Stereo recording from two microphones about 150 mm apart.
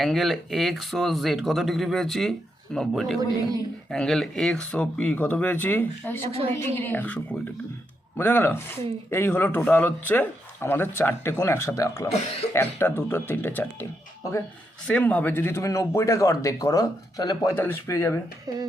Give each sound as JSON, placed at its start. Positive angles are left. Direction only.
{"t": 0.0, "sound": "speech", "side_deg": 0}
{"t": 12.1, "sound": "speech", "side_deg": 45}
{"t": 12.5, "sound": "speech", "side_deg": 15}
{"t": 14.8, "sound": "speech", "side_deg": 10}